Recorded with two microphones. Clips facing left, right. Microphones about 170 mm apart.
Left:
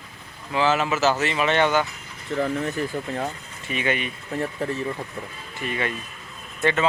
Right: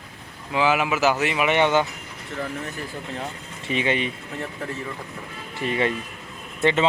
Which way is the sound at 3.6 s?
25° right (ahead or behind).